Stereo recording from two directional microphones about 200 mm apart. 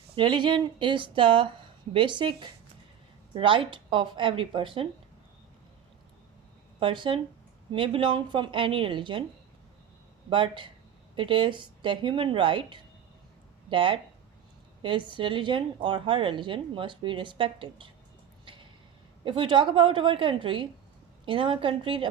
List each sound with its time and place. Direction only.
0.2 s speech: 25° right (ahead or behind)
6.7 s speech: 25° right (ahead or behind)
10.2 s speech: 25° right (ahead or behind)
18.4 s a sound: 25° right (ahead or behind)
19.2 s speech: 25° right (ahead or behind)